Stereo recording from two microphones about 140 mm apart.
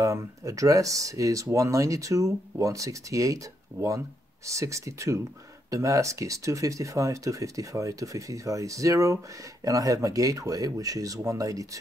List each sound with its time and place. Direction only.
0.0 s speech: 25° right (ahead or behind)
4.5 s speech: 20° right (ahead or behind)